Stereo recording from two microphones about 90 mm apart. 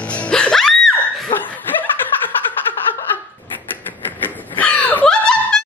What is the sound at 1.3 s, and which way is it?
Laughter, 20° left (ahead or behind).